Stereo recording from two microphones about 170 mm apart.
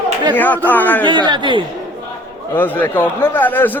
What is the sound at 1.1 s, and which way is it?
Speech, 30° right (ahead or behind).